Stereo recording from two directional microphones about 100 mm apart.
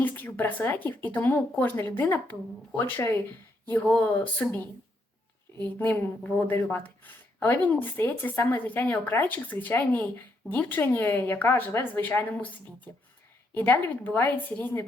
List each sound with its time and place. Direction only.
0.0 s a woman's voice: 20° left (ahead or behind)
5.8 s speech: 15° left (ahead or behind)
13.5 s a woman's voice: 15° left (ahead or behind)